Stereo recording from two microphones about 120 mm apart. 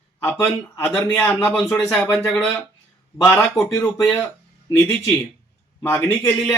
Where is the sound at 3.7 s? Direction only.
20° left (ahead or behind).